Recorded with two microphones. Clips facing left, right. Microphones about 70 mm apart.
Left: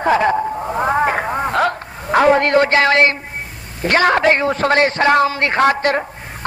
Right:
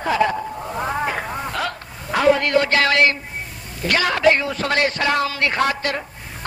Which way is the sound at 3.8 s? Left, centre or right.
Left.